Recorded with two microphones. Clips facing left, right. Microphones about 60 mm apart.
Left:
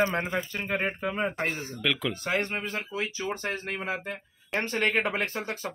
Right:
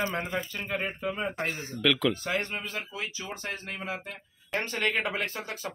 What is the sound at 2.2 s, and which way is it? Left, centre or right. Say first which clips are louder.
Speech: left 2 dB; left.